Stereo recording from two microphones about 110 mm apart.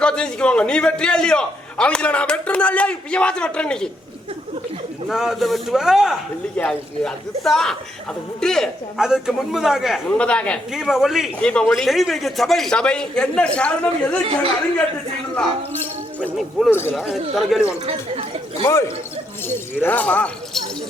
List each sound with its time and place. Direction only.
0.0 s a man's voice: 10° left (ahead or behind)
5.0 s a man's voice: 5° right (ahead or behind)
6.6 s a man's voice: 10° left (ahead or behind)
9.0 s a man's voice: 5° right (ahead or behind)
10.1 s a man's voice: 10° left (ahead or behind)
10.7 s a man's voice: 5° right (ahead or behind)
11.3 s a man's voice: 10° left (ahead or behind)
16.4 s a man's voice: centre (ahead or behind)
17.8 s speech: 60° right (ahead or behind)
18.6 s speech: 25° left (ahead or behind)
19.8 s a man's voice: 15° left (ahead or behind)